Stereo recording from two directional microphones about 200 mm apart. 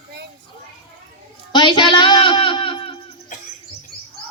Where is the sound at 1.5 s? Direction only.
25° left (ahead or behind).